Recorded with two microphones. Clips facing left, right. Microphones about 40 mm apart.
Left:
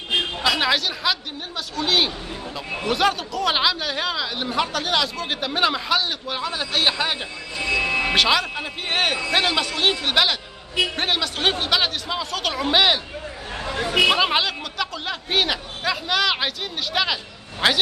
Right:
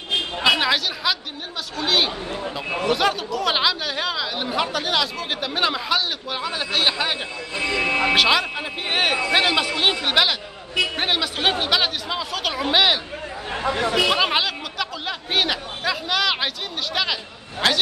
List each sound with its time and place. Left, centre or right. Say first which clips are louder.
0.6 s a woman's voice: even; centre
7.5 s speech: even; right
8.1 s speech: right 1 dB; centre
13.5 s speech: right 4 dB; right
14.0 s speech: left 1 dB; centre